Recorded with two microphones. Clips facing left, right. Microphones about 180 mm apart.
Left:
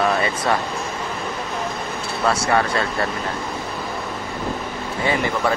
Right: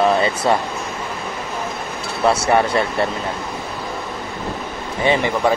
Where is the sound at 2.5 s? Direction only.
20° right (ahead or behind).